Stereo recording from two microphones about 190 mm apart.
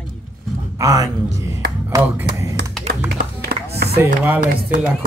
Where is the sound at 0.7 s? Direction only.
15° right (ahead or behind).